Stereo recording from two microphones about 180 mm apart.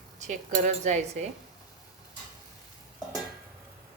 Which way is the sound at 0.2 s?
40° right (ahead or behind).